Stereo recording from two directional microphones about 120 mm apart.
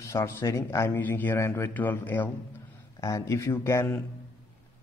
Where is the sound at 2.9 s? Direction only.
25° left (ahead or behind).